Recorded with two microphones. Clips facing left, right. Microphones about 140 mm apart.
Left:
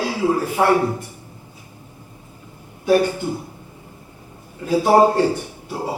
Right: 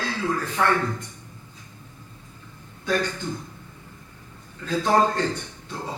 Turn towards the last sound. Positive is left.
turn(degrees=10)  # may be behind; listen again after turning